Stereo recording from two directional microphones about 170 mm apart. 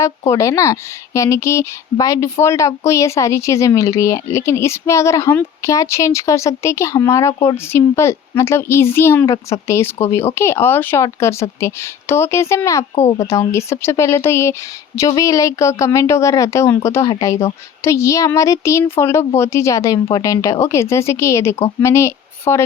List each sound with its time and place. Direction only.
0.0 s a woman's voice: 20° left (ahead or behind)